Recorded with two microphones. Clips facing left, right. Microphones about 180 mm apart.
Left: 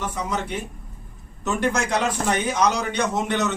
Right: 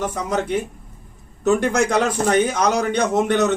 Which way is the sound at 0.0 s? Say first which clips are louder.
Right 5 dB; 45° right (ahead or behind).